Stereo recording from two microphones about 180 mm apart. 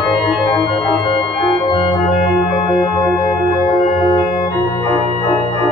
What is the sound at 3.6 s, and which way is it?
Organ, 45° left (ahead or behind).